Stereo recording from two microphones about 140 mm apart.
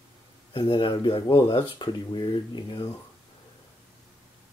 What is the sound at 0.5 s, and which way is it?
Speech, 40° left (ahead or behind).